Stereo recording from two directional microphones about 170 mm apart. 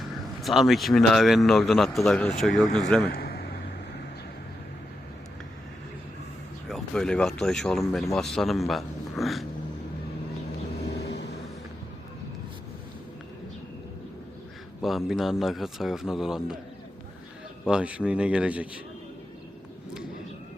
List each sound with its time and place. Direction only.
0.4 s speech: centre (ahead or behind)
3.1 s a sound: 65° left (ahead or behind)
6.7 s speech: centre (ahead or behind)
10.9 s vehicle: 75° left (ahead or behind)
14.8 s speech: centre (ahead or behind)
17.7 s speech: 5° right (ahead or behind)